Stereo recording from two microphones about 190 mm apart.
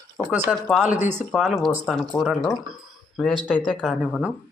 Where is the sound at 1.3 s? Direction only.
Centre (ahead or behind).